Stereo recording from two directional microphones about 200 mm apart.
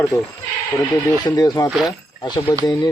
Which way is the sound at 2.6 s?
20° left (ahead or behind).